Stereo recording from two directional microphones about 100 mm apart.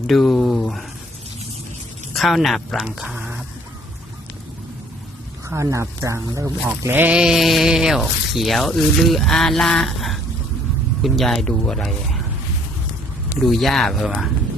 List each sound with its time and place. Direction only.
0.1 s speech: centre (ahead or behind)
2.1 s speech: centre (ahead or behind)
5.5 s speech: 30° right (ahead or behind)
7.2 s speech: 5° right (ahead or behind)
13.3 s speech: centre (ahead or behind)